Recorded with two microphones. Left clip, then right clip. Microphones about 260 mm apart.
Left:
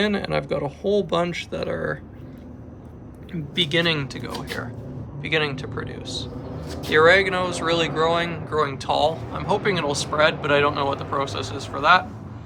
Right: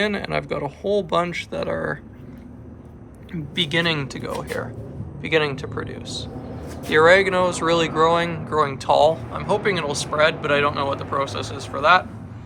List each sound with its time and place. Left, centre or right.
0.0 s speech: centre
3.3 s speech: centre